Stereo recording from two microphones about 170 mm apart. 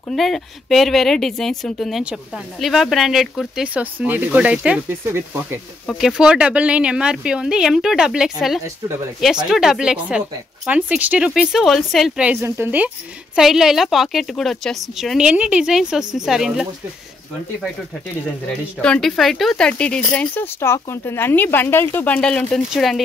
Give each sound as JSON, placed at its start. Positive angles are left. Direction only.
{"t": 0.1, "sound": "speech", "side_deg": 0}
{"t": 5.9, "sound": "speech", "side_deg": 0}
{"t": 12.3, "sound": "speech", "side_deg": -15}
{"t": 18.8, "sound": "speech", "side_deg": 5}